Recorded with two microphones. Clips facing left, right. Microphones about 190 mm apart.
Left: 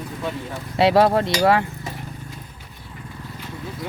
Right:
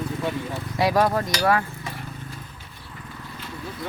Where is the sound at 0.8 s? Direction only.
25° left (ahead or behind).